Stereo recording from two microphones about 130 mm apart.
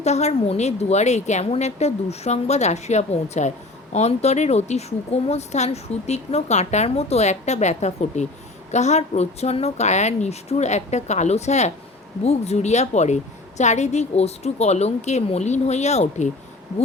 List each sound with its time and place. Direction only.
0.0 s a woman's voice: 60° left (ahead or behind)